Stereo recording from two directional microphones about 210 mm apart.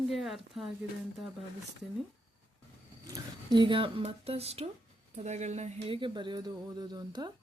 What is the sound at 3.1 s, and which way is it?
Speech, 20° right (ahead or behind).